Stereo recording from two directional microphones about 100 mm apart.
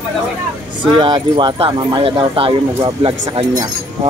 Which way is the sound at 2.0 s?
65° right (ahead or behind).